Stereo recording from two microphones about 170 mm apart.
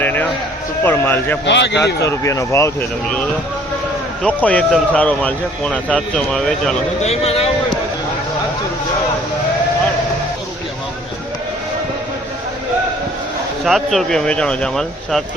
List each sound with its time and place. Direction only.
0.0 s a sound: 10° left (ahead or behind)
0.9 s a man's voice: 10° left (ahead or behind)
1.5 s speech: 90° left
2.0 s a man's voice: 20° left (ahead or behind)
4.2 s a man's voice: 10° left (ahead or behind)
7.0 s a man's voice: 40° left (ahead or behind)
13.7 s a man's voice: centre (ahead or behind)